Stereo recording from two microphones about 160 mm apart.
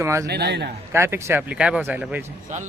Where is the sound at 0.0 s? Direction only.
20° right (ahead or behind).